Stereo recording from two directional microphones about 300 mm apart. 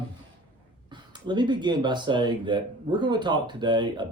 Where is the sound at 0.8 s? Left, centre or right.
Centre.